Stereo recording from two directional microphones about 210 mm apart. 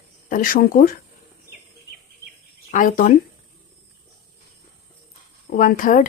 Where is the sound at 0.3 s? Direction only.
40° left (ahead or behind).